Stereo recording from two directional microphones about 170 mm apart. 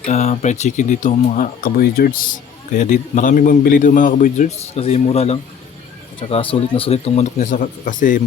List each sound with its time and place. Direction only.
0.1 s a man's voice: 40° left (ahead or behind); by 2.2 s 60° left (ahead or behind)
2.7 s a man's voice: 45° left (ahead or behind)